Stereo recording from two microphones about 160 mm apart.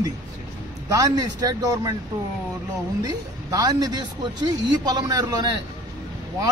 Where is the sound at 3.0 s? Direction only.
25° right (ahead or behind).